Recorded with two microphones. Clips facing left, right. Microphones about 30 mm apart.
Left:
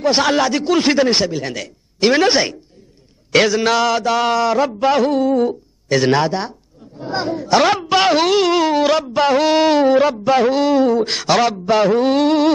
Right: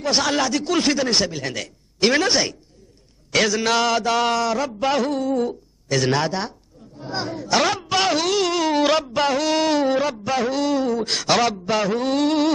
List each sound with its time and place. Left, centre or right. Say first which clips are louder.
0.0 s speech: left 5 dB; centre
1.2 s speech: left 4 dB; centre
2.2 s speech: left 5 dB; left
3.7 s a sound: left 3 dB; centre
4.5 s speech: left 6 dB; left
6.2 s a sound: left 4 dB; centre
7.0 s speech: left 6 dB; centre
8.7 s a sound: left 3 dB; centre
9.3 s speech: left 7 dB; left